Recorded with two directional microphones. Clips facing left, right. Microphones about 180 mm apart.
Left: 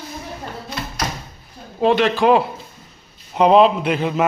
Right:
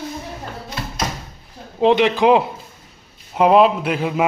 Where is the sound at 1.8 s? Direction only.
20° right (ahead or behind).